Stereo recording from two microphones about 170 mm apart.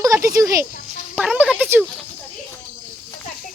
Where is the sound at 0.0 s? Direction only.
20° right (ahead or behind).